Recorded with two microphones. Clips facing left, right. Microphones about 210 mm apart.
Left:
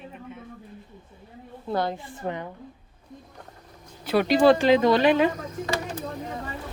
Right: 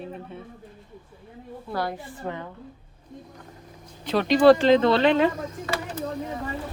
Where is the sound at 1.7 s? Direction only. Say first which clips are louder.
Left 3 dB; 20° left (ahead or behind).